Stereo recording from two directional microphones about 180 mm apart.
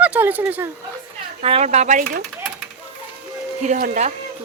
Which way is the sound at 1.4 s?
35° right (ahead or behind).